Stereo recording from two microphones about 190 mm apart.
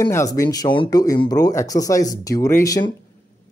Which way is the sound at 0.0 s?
15° left (ahead or behind).